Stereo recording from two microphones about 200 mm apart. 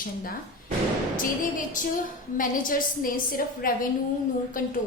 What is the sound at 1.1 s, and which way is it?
A woman's voice, 40° left (ahead or behind).